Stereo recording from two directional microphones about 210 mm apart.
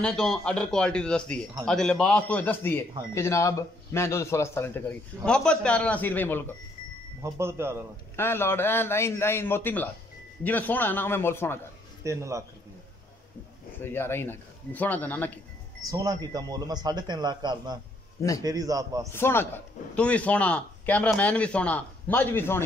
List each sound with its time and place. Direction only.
0.0 s speech: 5° left (ahead or behind)
7.2 s a man's voice: 15° right (ahead or behind)
8.2 s speech: 10° left (ahead or behind)
12.0 s a man's voice: 15° right (ahead or behind)
13.7 s speech: 10° left (ahead or behind)
15.9 s a man's voice: 15° right (ahead or behind)
19.1 s speech: 10° left (ahead or behind)